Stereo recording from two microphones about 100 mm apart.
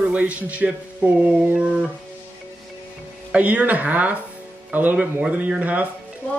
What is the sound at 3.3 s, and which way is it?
Speech, 15° right (ahead or behind).